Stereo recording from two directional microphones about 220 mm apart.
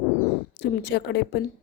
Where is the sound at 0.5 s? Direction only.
50° left (ahead or behind).